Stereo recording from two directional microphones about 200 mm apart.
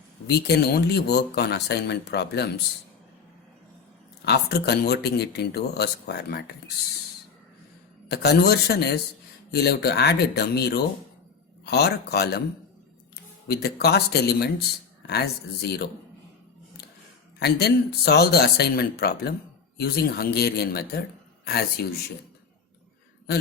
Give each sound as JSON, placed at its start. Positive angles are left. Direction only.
{"t": 0.3, "sound": "speech", "side_deg": 55}
{"t": 4.3, "sound": "speech", "side_deg": 55}
{"t": 8.1, "sound": "speech", "side_deg": 55}
{"t": 13.5, "sound": "speech", "side_deg": 55}
{"t": 17.4, "sound": "speech", "side_deg": 55}